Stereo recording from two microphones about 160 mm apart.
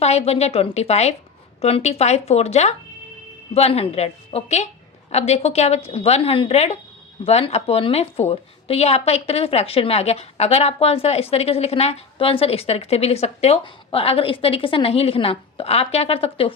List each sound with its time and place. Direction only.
0.0 s a woman's voice: 40° left (ahead or behind)